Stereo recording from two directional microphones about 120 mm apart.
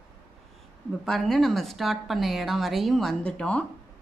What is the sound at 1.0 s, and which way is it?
A woman's voice, 5° left (ahead or behind).